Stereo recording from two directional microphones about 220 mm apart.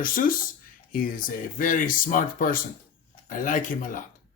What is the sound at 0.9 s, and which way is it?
Speech, 40° left (ahead or behind).